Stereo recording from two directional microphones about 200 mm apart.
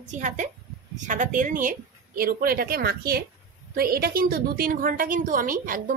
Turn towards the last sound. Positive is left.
turn(degrees=-45)  # may be behind; listen again after turning